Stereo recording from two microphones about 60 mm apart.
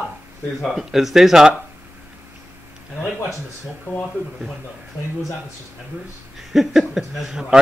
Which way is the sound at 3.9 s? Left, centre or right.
Left.